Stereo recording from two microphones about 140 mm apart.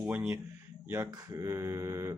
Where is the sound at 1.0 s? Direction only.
30° right (ahead or behind).